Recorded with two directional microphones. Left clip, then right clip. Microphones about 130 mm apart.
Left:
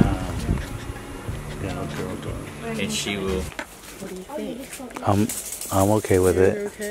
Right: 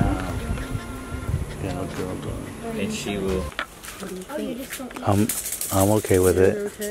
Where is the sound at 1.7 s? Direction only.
Centre (ahead or behind).